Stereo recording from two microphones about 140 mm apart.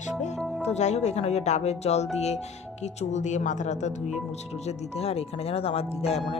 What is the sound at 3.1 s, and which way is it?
Speech, 55° left (ahead or behind).